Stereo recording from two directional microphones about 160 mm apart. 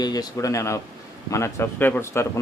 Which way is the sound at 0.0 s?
25° left (ahead or behind).